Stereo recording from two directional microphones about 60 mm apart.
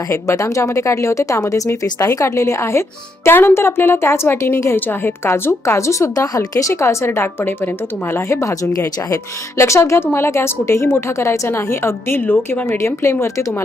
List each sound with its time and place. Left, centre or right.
0.1 s a woman's voice: left
8.3 s a woman's voice: left
12.6 s a woman's voice: left